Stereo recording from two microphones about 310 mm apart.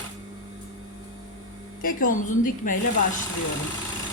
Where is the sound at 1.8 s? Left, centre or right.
Left.